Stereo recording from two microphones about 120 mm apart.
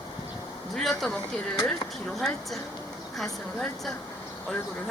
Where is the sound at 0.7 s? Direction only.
5° left (ahead or behind).